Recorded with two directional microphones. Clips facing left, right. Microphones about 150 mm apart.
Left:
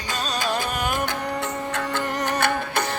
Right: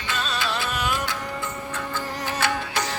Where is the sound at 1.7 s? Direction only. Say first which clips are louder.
Left 5 dB; 65° left (ahead or behind).